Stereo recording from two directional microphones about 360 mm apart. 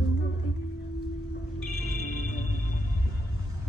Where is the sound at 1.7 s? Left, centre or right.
Left.